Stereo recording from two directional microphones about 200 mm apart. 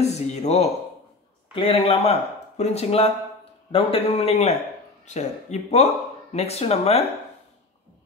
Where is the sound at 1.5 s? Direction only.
25° left (ahead or behind).